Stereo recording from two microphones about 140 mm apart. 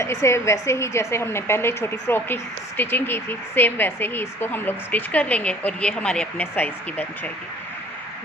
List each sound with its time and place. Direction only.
0.0 s a woman's voice: 20° left (ahead or behind)